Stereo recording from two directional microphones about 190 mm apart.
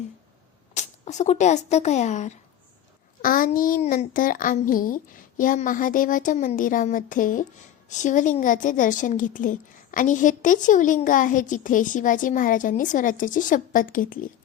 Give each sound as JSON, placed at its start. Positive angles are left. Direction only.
{"t": 0.7, "sound": "speech", "side_deg": 40}